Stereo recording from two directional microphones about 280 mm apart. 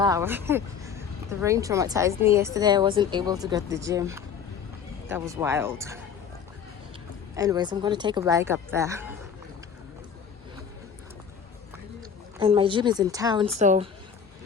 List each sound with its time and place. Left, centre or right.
0.0 s speech: centre
7.3 s speech: centre
12.4 s speech: centre